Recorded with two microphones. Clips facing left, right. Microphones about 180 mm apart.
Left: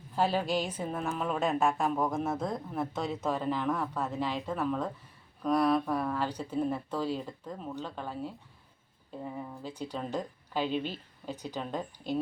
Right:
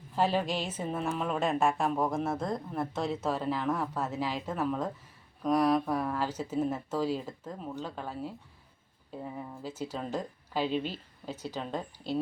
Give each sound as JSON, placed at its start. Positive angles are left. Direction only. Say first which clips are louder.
{"t": 0.2, "sound": "a woman's voice", "louder": "even", "side_deg": 10}
{"t": 0.8, "sound": "a woman's voice", "louder": "right 1 dB", "side_deg": -5}